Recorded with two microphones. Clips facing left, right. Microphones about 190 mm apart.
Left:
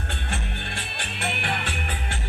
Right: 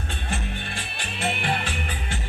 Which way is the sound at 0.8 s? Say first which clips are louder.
Right 3 dB; 60° left (ahead or behind).